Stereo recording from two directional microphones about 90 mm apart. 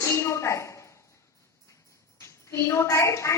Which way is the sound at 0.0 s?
30° left (ahead or behind).